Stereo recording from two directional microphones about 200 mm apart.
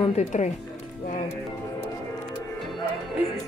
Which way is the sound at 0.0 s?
30° left (ahead or behind).